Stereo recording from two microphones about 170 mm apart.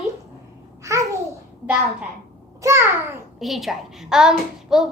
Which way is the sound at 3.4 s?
Centre (ahead or behind).